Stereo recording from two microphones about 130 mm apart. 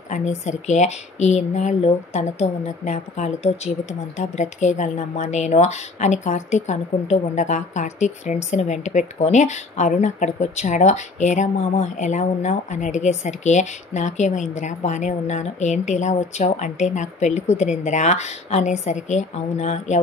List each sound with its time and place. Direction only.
0.1 s speech: 65° left (ahead or behind)